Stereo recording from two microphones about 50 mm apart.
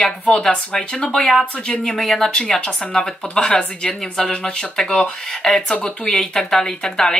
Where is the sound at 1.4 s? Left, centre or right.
Left.